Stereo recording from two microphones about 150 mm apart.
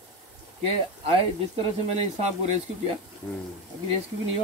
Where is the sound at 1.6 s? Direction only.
45° right (ahead or behind).